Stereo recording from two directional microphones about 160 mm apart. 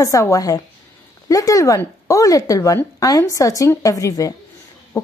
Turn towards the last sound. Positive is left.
turn(degrees=20)  # may be behind; listen again after turning